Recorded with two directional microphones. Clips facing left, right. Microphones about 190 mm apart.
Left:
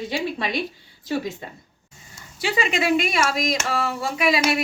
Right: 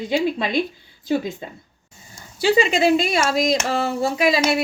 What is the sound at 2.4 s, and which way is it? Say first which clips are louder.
Speech: right 6 dB; 30° right (ahead or behind).